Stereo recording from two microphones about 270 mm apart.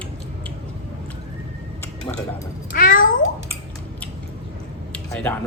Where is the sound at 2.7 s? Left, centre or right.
Left.